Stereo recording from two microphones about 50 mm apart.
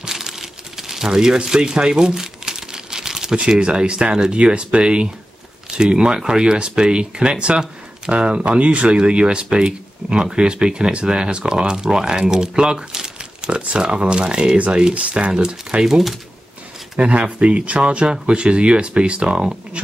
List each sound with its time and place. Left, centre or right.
0.0 s a sound: centre
3.3 s speech: right
17.0 s speech: right